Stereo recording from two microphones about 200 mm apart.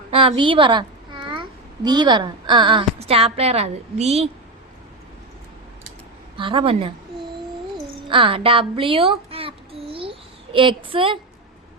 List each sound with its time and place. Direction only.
0.1 s a child's voice: 25° right (ahead or behind)
6.3 s speech: 25° right (ahead or behind)
8.0 s a sound: 25° right (ahead or behind)